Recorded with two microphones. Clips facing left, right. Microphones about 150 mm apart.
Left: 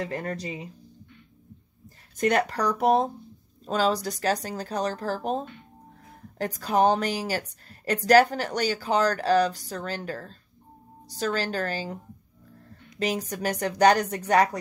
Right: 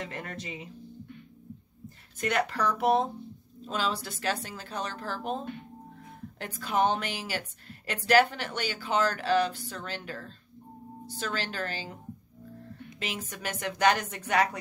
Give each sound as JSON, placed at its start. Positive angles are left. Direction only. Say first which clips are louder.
{"t": 0.0, "sound": "a woman's voice", "louder": "left 7 dB", "side_deg": 40}
{"t": 2.1, "sound": "a woman's voice", "louder": "left 5 dB", "side_deg": 40}
{"t": 13.0, "sound": "a woman's voice", "louder": "left 9 dB", "side_deg": 40}